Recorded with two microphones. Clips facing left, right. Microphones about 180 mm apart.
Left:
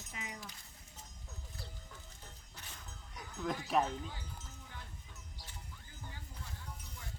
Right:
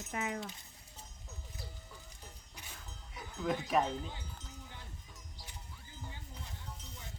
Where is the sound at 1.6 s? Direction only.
10° right (ahead or behind).